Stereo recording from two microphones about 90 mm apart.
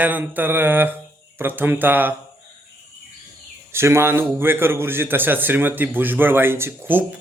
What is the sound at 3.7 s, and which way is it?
A man's voice, 30° right (ahead or behind).